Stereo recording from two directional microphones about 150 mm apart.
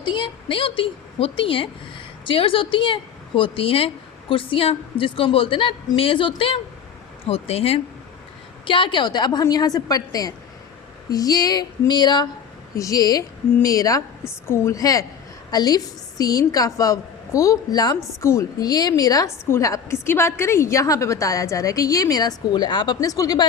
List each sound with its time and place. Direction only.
0.0 s a woman's voice: 30° left (ahead or behind)